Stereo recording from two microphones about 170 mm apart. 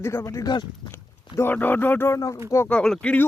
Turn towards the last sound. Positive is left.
turn(degrees=5)  # may be behind; listen again after turning